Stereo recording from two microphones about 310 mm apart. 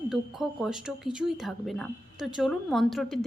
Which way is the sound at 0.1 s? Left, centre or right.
Centre.